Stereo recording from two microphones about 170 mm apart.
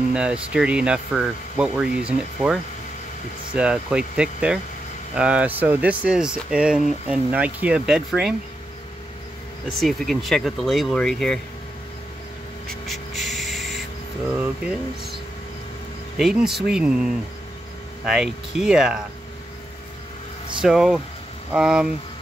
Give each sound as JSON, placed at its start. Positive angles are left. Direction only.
{"t": 0.1, "sound": "speech", "side_deg": -5}
{"t": 9.7, "sound": "speech", "side_deg": 0}
{"t": 12.6, "sound": "a sound", "side_deg": 0}
{"t": 16.2, "sound": "speech", "side_deg": 0}
{"t": 20.6, "sound": "speech", "side_deg": 0}